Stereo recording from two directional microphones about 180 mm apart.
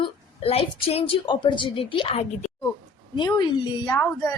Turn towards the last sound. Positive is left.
turn(degrees=20)  # may be behind; listen again after turning